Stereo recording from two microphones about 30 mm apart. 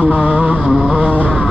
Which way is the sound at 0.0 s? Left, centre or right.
Right.